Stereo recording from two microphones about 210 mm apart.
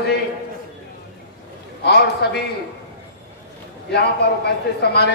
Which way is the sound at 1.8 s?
50° left (ahead or behind).